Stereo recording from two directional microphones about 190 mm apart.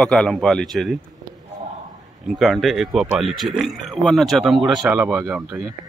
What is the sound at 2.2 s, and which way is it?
Speech, centre (ahead or behind).